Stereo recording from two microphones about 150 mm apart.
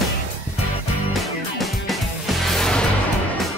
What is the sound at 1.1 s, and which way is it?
Music, centre (ahead or behind).